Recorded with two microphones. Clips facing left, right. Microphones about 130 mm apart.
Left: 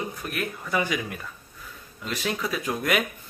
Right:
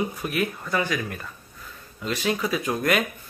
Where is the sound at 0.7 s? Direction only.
10° left (ahead or behind).